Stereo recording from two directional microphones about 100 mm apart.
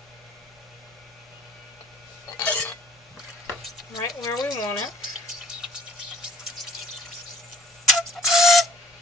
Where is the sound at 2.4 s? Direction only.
15° left (ahead or behind).